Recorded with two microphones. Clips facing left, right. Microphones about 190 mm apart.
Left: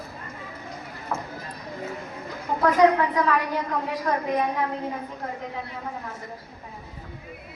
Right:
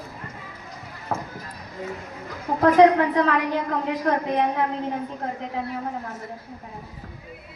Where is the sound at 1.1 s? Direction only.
55° right (ahead or behind).